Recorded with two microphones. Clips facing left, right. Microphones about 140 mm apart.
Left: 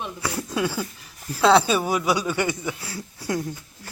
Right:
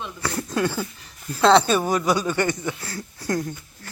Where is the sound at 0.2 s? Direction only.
5° left (ahead or behind).